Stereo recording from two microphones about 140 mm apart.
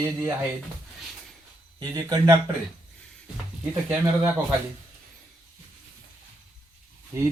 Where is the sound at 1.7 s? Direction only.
25° right (ahead or behind).